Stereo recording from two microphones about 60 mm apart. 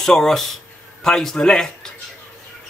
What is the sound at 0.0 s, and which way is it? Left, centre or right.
Speech, centre.